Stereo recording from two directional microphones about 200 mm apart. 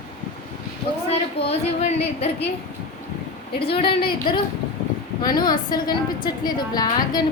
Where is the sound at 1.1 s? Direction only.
30° left (ahead or behind).